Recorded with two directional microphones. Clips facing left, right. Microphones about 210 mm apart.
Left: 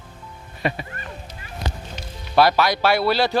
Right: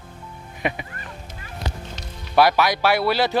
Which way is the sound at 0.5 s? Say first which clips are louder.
Left 1 dB; 15° right (ahead or behind).